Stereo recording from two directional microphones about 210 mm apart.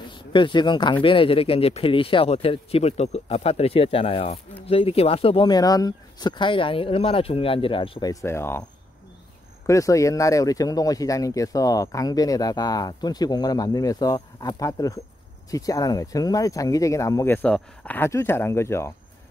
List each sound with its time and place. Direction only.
0.1 s speech: 20° left (ahead or behind)
9.7 s speech: 15° left (ahead or behind)